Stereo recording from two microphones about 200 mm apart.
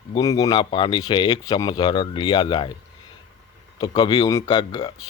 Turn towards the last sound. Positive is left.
turn(degrees=20)  # may be behind; listen again after turning